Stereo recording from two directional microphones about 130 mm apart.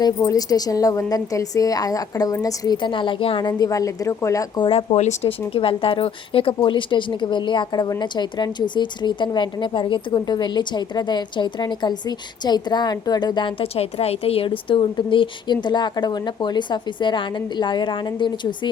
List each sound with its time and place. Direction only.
0.0 s a woman's voice: 30° left (ahead or behind)
4.6 s speech: 45° left (ahead or behind)
5.5 s a woman's voice: 45° left (ahead or behind)